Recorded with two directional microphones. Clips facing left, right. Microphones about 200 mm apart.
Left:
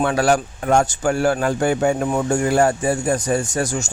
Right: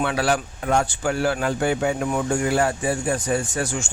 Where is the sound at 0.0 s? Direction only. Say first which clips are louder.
Left 5 dB; 45° left (ahead or behind).